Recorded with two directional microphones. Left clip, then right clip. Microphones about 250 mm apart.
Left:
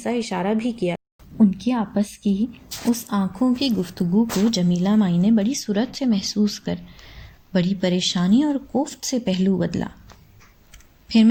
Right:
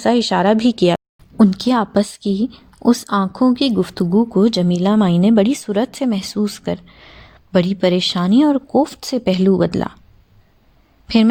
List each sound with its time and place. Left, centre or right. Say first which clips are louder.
0.0 s speech: right 10 dB; right
11.1 s a woman's voice: right 3 dB; right